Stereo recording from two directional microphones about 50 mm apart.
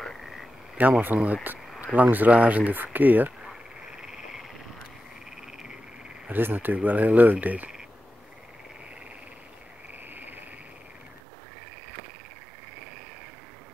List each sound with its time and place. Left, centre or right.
1.0 s speech: right
4.0 s frog: centre
6.3 s speech: right
10.0 s frog: right